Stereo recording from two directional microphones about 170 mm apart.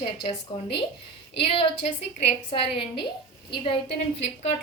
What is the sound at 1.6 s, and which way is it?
A woman's voice, 35° left (ahead or behind).